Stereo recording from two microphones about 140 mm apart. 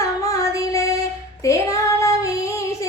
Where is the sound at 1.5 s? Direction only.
20° left (ahead or behind).